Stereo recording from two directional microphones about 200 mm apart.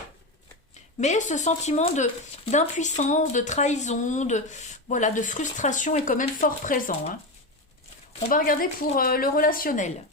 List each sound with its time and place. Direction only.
0.7 s speech: 35° left (ahead or behind)
8.3 s a woman's voice: 45° left (ahead or behind)